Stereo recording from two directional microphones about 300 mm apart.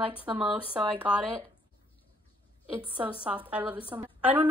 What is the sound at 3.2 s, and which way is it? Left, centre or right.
A woman's voice, centre.